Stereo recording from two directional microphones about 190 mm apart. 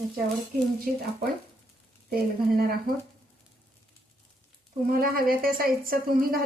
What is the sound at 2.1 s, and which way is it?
Speech, 50° right (ahead or behind).